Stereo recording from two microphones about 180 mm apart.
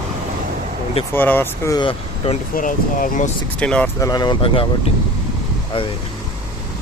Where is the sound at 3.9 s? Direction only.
20° left (ahead or behind).